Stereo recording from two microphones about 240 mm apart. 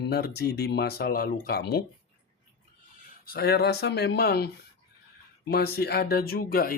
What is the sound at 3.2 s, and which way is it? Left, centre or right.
Speech, left.